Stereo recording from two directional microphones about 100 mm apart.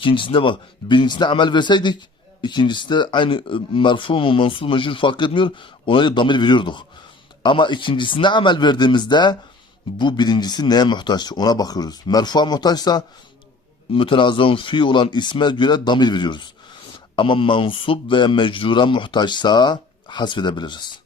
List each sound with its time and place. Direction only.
0.0 s speech: 60° left (ahead or behind); by 13.0 s 40° left (ahead or behind)
13.9 s speech: 60° left (ahead or behind)